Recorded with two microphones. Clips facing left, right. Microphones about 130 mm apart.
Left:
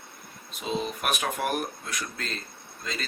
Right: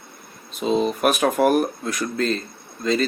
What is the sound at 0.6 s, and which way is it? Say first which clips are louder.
Speech: right 10 dB; 40° right (ahead or behind).